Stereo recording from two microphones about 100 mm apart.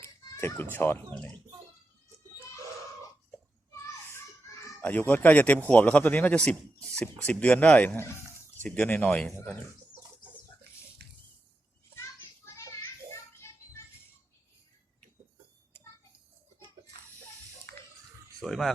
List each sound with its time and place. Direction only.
0.0 s a child's voice: 25° left (ahead or behind)
4.8 s a man's voice: 15° left (ahead or behind)
13.5 s music: 25° left (ahead or behind)
18.4 s speech: centre (ahead or behind)